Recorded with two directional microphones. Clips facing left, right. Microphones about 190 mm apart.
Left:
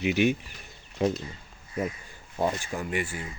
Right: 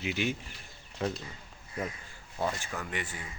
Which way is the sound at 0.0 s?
20° left (ahead or behind).